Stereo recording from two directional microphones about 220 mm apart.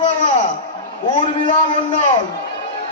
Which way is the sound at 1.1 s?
30° left (ahead or behind).